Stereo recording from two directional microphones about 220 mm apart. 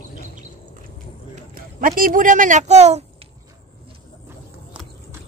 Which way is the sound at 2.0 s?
40° right (ahead or behind).